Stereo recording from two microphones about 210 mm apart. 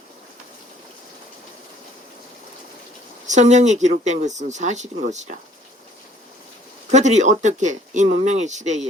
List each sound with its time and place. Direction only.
3.2 s speech: 35° right (ahead or behind)
6.9 s speech: 35° right (ahead or behind)